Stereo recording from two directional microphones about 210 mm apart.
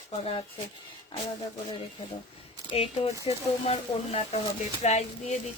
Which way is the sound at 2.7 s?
25° left (ahead or behind).